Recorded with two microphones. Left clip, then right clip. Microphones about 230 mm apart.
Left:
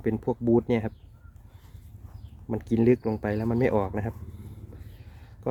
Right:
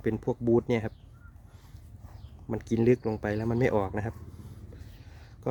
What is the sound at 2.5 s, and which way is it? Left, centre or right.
Speech, centre.